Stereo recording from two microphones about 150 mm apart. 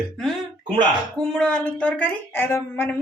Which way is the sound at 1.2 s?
5° left (ahead or behind).